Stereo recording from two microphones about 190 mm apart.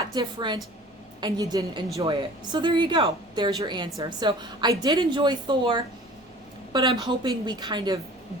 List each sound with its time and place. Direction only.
0.0 s a woman's voice: 20° right (ahead or behind)